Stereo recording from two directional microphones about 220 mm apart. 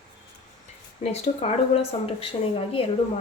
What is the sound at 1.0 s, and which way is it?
Speech, 30° left (ahead or behind).